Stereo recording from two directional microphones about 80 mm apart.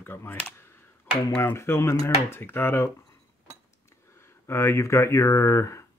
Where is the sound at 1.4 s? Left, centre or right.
Left.